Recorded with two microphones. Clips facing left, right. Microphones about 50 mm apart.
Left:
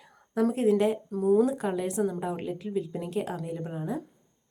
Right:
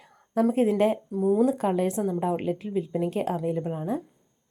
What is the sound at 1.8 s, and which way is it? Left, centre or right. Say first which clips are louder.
Speech: right 3 dB; right.